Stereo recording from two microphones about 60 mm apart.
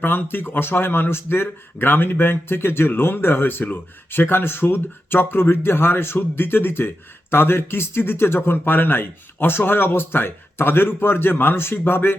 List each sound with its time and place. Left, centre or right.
0.0 s a man's voice: left